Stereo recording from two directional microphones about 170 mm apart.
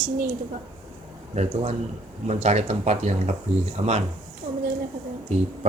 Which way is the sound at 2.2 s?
40° right (ahead or behind).